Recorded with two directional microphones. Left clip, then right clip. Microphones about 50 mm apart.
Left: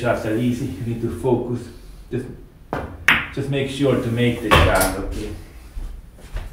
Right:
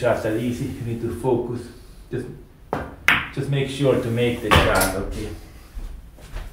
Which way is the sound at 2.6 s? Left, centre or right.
Centre.